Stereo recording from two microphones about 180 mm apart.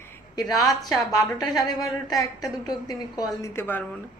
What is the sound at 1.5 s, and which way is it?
Speech, 20° left (ahead or behind).